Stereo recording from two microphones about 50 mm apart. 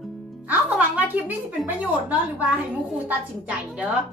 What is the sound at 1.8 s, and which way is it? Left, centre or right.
A woman's voice, right.